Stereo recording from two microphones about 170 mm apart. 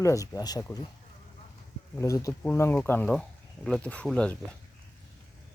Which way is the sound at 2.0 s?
20° left (ahead or behind).